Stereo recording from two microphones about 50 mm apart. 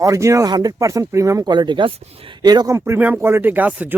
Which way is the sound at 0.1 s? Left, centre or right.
Right.